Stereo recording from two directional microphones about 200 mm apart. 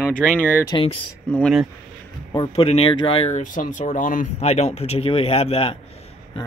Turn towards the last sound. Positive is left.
turn(degrees=30)  # may be behind; listen again after turning